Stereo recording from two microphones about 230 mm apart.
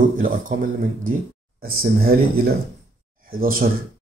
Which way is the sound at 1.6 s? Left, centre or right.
Right.